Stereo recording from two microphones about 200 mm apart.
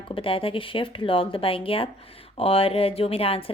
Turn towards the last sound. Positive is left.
turn(degrees=30)  # may be behind; listen again after turning